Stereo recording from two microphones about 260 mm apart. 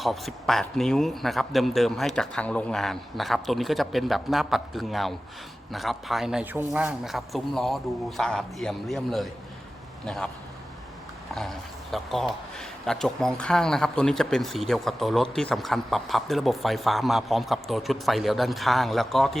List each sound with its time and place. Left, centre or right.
0.0 s speech: centre
11.3 s speech: centre